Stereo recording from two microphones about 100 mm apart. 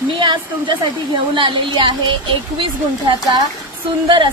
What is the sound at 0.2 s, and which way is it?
A woman's voice, 50° right (ahead or behind).